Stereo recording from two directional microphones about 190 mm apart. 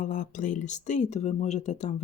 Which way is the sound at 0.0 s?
40° left (ahead or behind).